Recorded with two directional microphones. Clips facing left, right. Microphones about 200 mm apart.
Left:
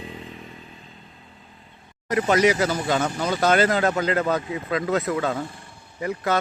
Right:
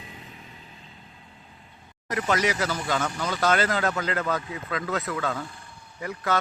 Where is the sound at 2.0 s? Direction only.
25° left (ahead or behind).